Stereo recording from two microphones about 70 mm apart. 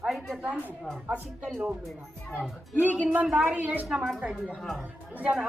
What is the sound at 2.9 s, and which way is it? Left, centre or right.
A woman's voice, centre.